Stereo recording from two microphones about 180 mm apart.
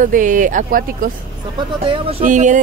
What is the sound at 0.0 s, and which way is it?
Speech, 45° right (ahead or behind).